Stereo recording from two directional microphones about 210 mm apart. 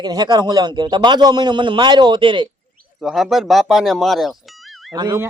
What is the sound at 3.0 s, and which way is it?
Speech, centre (ahead or behind).